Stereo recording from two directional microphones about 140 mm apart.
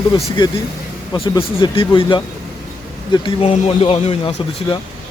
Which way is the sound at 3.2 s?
40° left (ahead or behind).